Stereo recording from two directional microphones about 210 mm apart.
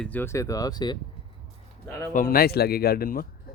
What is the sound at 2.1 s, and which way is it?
Speech, 40° left (ahead or behind).